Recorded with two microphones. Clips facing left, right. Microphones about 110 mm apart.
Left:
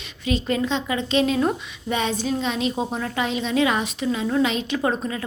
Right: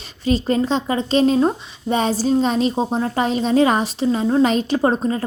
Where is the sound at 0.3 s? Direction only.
35° right (ahead or behind).